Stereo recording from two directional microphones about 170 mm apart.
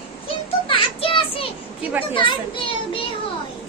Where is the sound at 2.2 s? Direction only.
30° left (ahead or behind).